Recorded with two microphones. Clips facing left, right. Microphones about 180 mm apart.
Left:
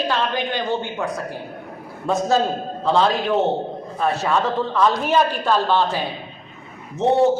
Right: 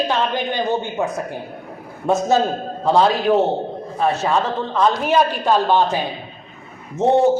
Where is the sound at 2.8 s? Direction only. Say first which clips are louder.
Right 3 dB; 40° right (ahead or behind).